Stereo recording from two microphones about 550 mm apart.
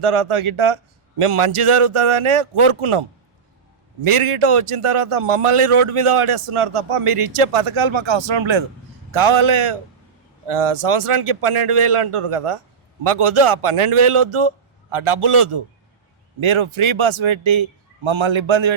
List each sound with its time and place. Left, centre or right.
0.0 s a man's voice: right